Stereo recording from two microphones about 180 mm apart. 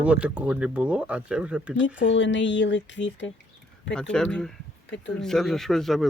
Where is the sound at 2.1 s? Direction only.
90° left.